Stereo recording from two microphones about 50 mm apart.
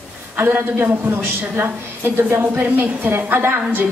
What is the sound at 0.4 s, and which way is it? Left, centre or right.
A woman's voice, right.